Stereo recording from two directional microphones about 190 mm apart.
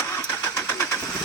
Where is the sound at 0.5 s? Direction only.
10° left (ahead or behind).